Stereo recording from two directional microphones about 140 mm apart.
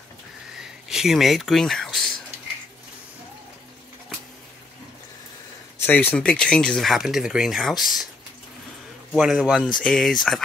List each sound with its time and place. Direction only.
0.6 s a sound: 5° right (ahead or behind)
5.9 s speech: 10° left (ahead or behind)
9.1 s speech: 5° right (ahead or behind)